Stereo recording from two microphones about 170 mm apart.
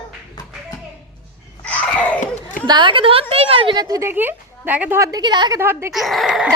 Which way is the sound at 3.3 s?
35° right (ahead or behind).